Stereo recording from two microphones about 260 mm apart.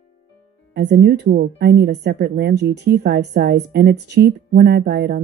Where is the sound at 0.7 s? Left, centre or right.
Right.